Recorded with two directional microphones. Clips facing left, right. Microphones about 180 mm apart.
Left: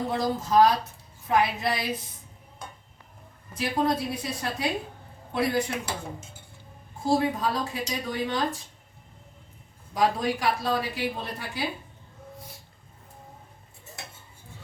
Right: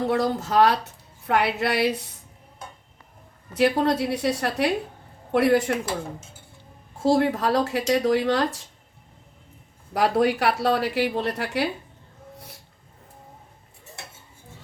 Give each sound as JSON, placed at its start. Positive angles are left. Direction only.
{"t": 0.1, "sound": "a woman's voice", "side_deg": -70}
{"t": 3.5, "sound": "a woman's voice", "side_deg": -70}
{"t": 7.0, "sound": "a woman's voice", "side_deg": -75}
{"t": 9.9, "sound": "a woman's voice", "side_deg": -70}